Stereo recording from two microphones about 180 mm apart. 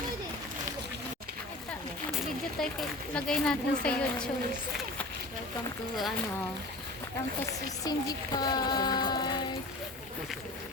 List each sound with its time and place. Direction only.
2.6 s a woman's voice: 5° left (ahead or behind)
7.4 s speech: 20° left (ahead or behind)